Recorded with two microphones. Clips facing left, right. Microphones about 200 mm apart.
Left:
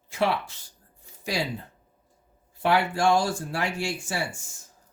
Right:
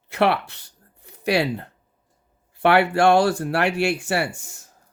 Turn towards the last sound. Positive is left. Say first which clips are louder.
# right 7 dB
turn(degrees=-65)  # may be behind; listen again after turning